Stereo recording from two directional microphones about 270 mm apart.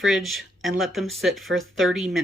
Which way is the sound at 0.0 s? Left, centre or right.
Centre.